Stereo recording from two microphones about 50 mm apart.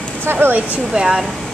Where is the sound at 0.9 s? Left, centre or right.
Centre.